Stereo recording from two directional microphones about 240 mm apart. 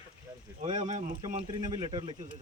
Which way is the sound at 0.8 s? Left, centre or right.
Right.